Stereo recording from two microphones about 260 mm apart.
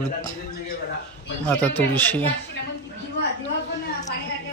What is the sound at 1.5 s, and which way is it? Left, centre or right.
Speech, centre.